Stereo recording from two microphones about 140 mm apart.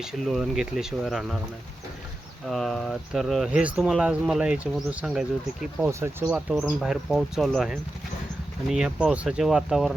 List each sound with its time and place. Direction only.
0.0 s speech: centre (ahead or behind)
2.5 s speech: centre (ahead or behind)